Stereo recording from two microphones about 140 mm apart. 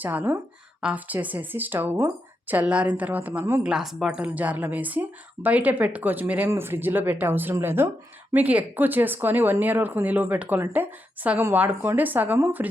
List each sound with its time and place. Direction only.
0.0 s a woman's voice: 15° right (ahead or behind)
3.6 s a woman's voice: 5° right (ahead or behind)